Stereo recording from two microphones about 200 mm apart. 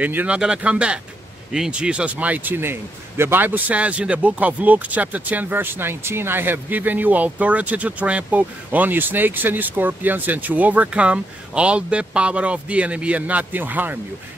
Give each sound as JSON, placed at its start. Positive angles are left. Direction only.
{"t": 0.0, "sound": "a man's voice", "side_deg": -10}